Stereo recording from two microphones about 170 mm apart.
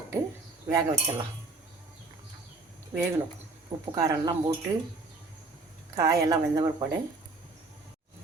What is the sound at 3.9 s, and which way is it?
Cutlery, 20° right (ahead or behind).